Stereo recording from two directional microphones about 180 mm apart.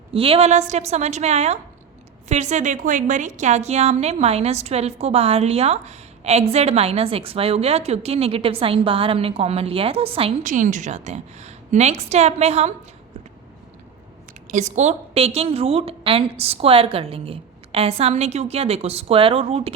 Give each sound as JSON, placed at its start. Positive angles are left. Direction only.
{"t": 0.1, "sound": "a woman's voice", "side_deg": -30}
{"t": 10.4, "sound": "a woman's voice", "side_deg": -45}
{"t": 14.5, "sound": "a woman's voice", "side_deg": -40}